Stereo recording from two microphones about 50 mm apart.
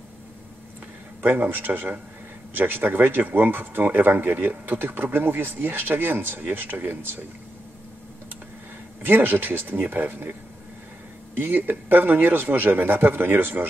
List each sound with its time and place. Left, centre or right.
1.2 s speech: right
9.0 s speech: right
11.3 s speech: right